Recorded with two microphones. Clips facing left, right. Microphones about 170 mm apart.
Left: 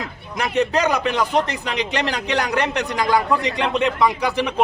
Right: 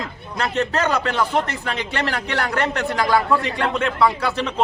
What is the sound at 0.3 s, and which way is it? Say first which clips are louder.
A man's voice: left 2 dB; 15° left (ahead or behind).